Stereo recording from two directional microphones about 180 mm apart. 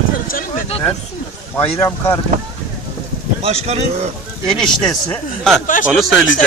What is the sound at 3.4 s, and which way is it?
Speech, 35° right (ahead or behind).